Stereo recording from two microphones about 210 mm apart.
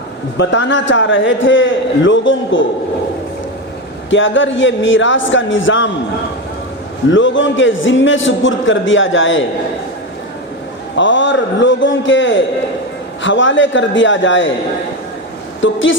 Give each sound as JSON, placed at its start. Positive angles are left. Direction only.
{"t": 0.3, "sound": "a man's voice", "side_deg": 60}
{"t": 4.1, "sound": "a man's voice", "side_deg": 65}
{"t": 7.1, "sound": "a man's voice", "side_deg": 65}
{"t": 10.9, "sound": "a man's voice", "side_deg": 60}
{"t": 15.6, "sound": "a man's voice", "side_deg": 65}